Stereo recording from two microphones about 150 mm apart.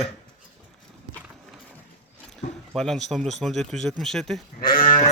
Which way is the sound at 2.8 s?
5° left (ahead or behind).